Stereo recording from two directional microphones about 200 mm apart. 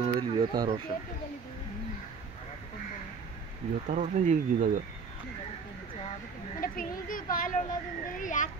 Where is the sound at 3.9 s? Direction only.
40° right (ahead or behind).